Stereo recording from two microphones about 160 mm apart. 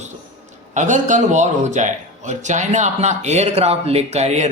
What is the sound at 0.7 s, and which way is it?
Speech, 50° right (ahead or behind).